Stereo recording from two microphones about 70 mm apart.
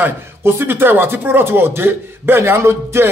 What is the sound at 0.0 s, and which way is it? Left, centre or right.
Speech, right.